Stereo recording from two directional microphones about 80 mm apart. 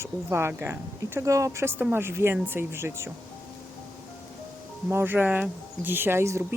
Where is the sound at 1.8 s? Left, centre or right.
Right.